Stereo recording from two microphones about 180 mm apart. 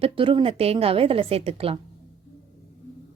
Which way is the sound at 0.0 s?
30° right (ahead or behind).